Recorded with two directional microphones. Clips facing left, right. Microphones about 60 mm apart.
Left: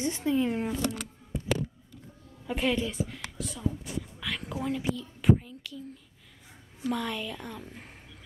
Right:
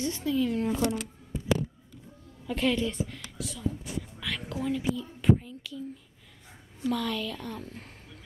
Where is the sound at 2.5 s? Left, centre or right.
Centre.